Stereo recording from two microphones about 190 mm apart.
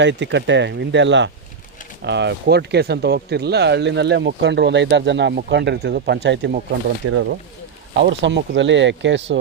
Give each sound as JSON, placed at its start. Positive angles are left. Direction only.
{"t": 0.0, "sound": "speech", "side_deg": -70}
{"t": 6.7, "sound": "speech", "side_deg": -80}
{"t": 8.2, "sound": "speech", "side_deg": -70}